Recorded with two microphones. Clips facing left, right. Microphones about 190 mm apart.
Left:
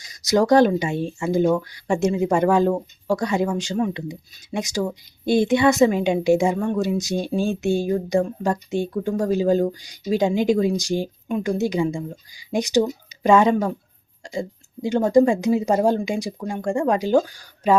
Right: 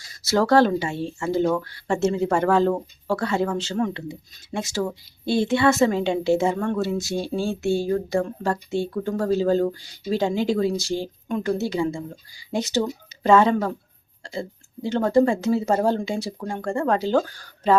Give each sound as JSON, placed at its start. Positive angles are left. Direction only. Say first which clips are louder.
{"t": 0.0, "sound": "speech", "louder": "left 3 dB", "side_deg": 15}